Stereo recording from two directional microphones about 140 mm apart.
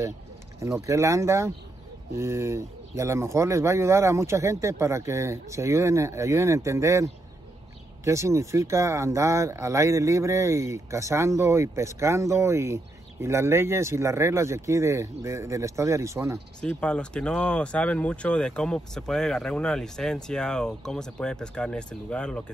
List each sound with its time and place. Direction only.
0.6 s speech: 20° right (ahead or behind)
16.6 s speech: 5° left (ahead or behind)